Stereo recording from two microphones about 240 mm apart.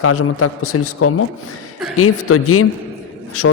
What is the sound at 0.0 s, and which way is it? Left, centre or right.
A man's voice, left.